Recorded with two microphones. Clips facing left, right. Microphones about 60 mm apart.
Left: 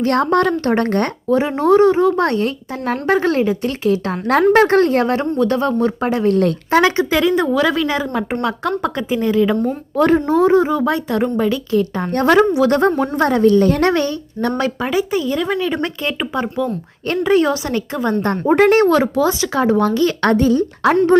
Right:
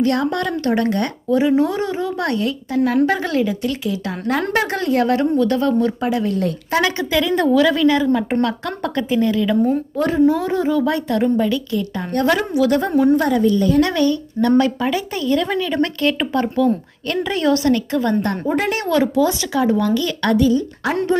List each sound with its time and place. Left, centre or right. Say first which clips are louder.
0.1 s speech: left 5 dB; left
6.7 s a woman's voice: left 4 dB; left
9.9 s a woman's voice: left 4 dB; left
10.3 s a woman's voice: left 5 dB; left
13.8 s speech: left 2 dB; left
14.6 s a woman's voice: even; centre
17.1 s a woman's voice: left 3 dB; left
18.4 s speech: left 12 dB; left
18.8 s speech: left 3 dB; left